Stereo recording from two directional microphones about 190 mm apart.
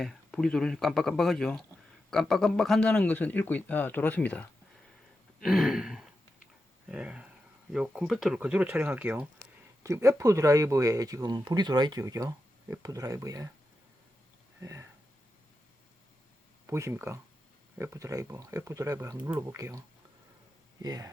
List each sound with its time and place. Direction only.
0.0 s speech: centre (ahead or behind); by 13.5 s 15° right (ahead or behind)
14.6 s a sound: 15° right (ahead or behind)
16.6 s speech: 15° right (ahead or behind)
20.8 s speech: 20° right (ahead or behind)